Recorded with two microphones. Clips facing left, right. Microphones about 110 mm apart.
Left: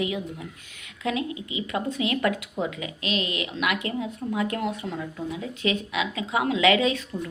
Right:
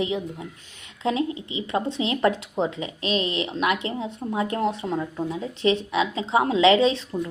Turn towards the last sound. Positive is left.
turn(degrees=-30)  # may be behind; listen again after turning